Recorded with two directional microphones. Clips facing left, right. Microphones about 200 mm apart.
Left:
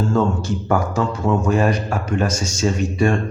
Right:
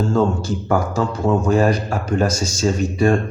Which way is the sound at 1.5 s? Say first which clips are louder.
Right 2 dB; 35° right (ahead or behind).